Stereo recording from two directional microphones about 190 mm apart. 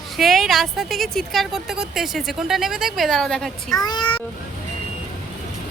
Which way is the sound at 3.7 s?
20° left (ahead or behind).